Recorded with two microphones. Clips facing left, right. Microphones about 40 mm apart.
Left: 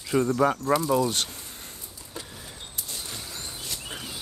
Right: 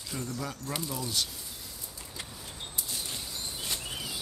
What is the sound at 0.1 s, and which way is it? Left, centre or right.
Speech, left.